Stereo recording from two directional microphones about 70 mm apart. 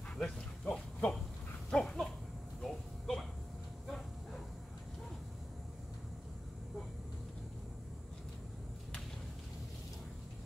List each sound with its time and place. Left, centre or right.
0.2 s a sound: centre
1.7 s goat: centre
2.6 s music: centre
3.8 s bow-wow: centre